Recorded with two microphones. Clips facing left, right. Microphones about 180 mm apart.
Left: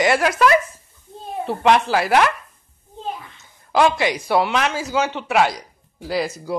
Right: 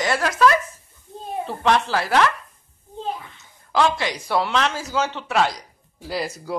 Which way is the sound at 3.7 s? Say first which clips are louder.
Left 3 dB; 10° left (ahead or behind).